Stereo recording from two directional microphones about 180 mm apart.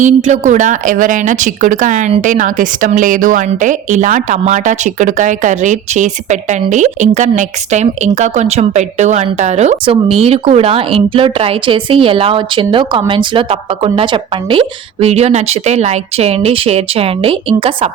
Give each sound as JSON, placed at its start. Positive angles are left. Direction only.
{"t": 0.0, "sound": "speech", "side_deg": -40}